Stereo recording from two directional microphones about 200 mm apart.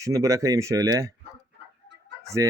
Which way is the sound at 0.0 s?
15° right (ahead or behind).